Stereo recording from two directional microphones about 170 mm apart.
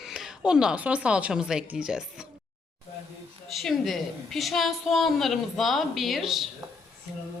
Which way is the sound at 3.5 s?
Centre (ahead or behind).